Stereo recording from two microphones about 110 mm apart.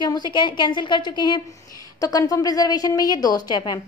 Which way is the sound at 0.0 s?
40° left (ahead or behind).